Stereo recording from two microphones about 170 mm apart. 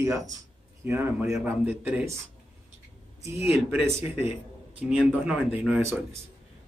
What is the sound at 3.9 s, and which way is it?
Speech, 15° right (ahead or behind).